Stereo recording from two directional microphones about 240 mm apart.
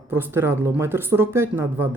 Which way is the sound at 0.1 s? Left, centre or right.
Centre.